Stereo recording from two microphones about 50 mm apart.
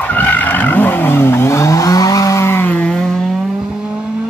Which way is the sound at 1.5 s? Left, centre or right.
Left.